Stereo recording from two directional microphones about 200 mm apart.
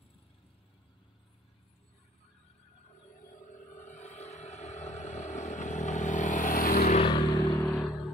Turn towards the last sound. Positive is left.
turn(degrees=10)  # may be behind; listen again after turning